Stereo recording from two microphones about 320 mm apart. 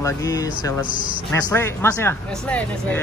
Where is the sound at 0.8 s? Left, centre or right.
Left.